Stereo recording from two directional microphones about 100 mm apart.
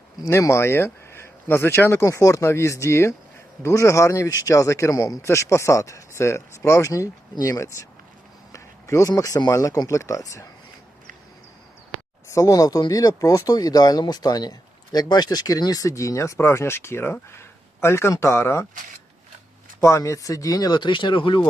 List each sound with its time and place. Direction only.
0.3 s speech: 30° left (ahead or behind)
12.3 s speech: 35° left (ahead or behind)
19.8 s speech: 30° left (ahead or behind); by 21.4 s 55° left (ahead or behind)